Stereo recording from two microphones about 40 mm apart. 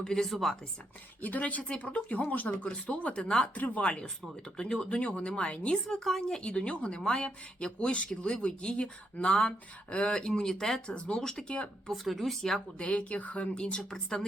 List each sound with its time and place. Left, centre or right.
0.0 s speech: centre
0.3 s speech: centre
1.2 s speech: left; by 3.5 s centre
3.5 s speech: left
4.5 s speech: centre
4.9 s speech: left
5.9 s speech: centre
6.5 s speech: left; by 10.8 s centre
10.8 s speech: left
11.1 s speech: centre
11.4 s speech: left
11.9 s speech: centre
12.5 s speech: left